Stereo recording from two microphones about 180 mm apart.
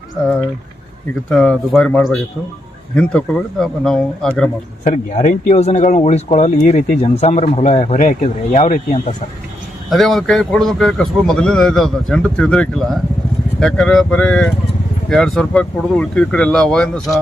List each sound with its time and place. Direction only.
1.3 s a man's voice: centre (ahead or behind)
4.8 s speech: 40° left (ahead or behind)
9.9 s a man's voice: centre (ahead or behind)